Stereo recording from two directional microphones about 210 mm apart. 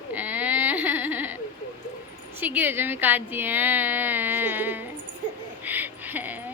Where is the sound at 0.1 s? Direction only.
10° right (ahead or behind).